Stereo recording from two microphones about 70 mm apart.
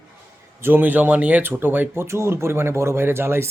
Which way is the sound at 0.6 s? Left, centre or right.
Right.